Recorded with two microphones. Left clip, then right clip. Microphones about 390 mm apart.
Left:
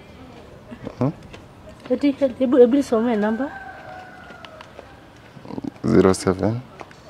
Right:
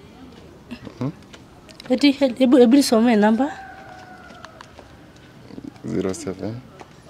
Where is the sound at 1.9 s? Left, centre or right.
Right.